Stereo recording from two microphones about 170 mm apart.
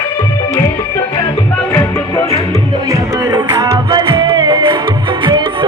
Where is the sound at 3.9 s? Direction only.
30° right (ahead or behind).